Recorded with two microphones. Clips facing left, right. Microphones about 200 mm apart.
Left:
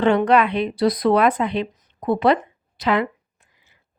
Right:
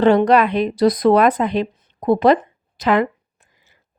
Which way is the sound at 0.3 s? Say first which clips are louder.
Right 2 dB; 40° right (ahead or behind).